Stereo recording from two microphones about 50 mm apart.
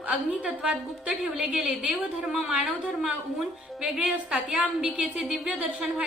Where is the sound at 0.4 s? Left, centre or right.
Centre.